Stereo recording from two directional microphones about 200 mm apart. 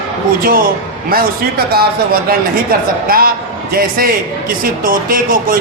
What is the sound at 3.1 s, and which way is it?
A man's voice, 45° right (ahead or behind).